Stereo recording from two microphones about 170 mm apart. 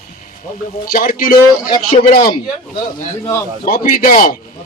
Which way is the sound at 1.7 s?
30° left (ahead or behind).